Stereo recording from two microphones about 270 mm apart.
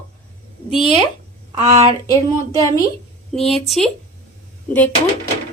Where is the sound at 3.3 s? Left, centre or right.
Centre.